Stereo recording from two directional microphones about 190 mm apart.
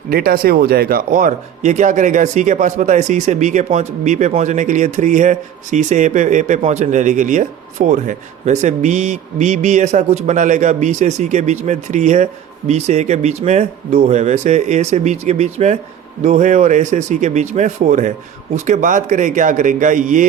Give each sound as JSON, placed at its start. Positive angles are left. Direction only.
{"t": 0.1, "sound": "speech", "side_deg": -50}